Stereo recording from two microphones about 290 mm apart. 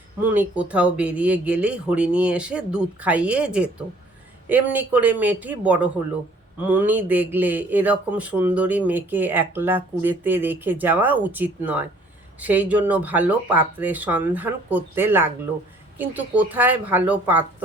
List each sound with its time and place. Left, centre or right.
0.2 s speech: centre